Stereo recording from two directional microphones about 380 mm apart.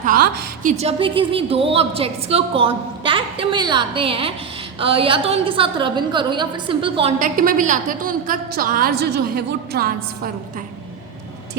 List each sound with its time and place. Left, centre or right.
0.0 s a woman's voice: right